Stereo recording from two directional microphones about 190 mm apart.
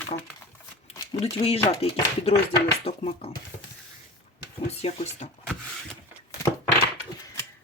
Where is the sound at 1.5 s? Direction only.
30° left (ahead or behind).